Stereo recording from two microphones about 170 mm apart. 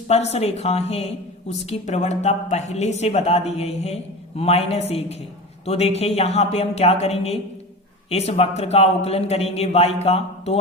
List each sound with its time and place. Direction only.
0.1 s a woman's voice: 40° left (ahead or behind)